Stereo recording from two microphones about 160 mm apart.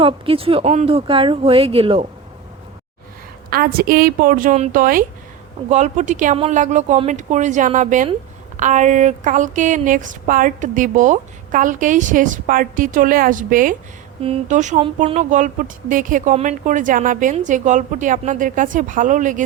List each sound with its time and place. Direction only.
0.0 s speech: 35° right (ahead or behind)
3.5 s speech: 65° right (ahead or behind)
5.6 s speech: 45° right (ahead or behind)
14.2 s speech: 45° right (ahead or behind)
15.0 s speech: 40° right (ahead or behind)
15.3 s speech: 55° right (ahead or behind)